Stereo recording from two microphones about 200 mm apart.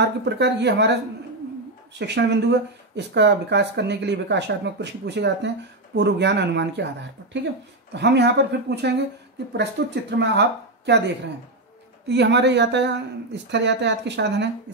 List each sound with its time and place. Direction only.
0.0 s speech: 60° right (ahead or behind)
2.0 s speech: 60° right (ahead or behind)
7.9 s speech: 60° right (ahead or behind)
12.1 s speech: 60° right (ahead or behind)